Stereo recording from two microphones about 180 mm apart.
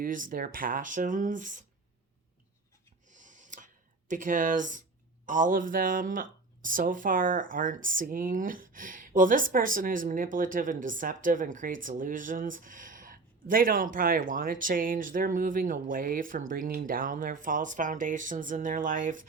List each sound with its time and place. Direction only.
0.0 s speech: 50° right (ahead or behind)
3.1 s a sound: 45° right (ahead or behind)
4.1 s speech: 45° right (ahead or behind)